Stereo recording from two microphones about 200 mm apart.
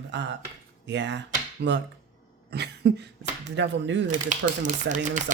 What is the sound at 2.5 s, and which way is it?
Cough, 55° right (ahead or behind).